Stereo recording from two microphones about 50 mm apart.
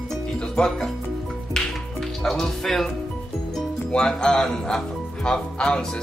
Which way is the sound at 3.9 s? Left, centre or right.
Centre.